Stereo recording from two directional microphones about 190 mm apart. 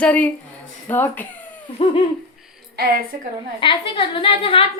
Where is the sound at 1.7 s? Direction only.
30° left (ahead or behind).